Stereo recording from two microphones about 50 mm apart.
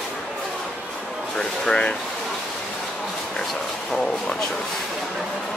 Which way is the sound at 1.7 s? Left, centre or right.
Centre.